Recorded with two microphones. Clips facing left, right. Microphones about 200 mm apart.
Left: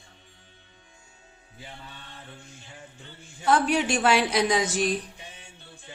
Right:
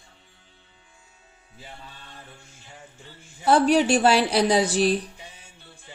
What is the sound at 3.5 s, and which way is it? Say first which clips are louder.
A woman's voice: right 5 dB; 35° right (ahead or behind).